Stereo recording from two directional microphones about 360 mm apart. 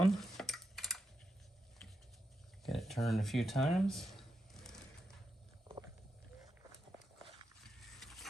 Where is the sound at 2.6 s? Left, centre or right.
Centre.